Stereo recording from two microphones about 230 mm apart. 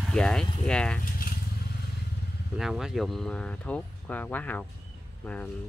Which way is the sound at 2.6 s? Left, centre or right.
Centre.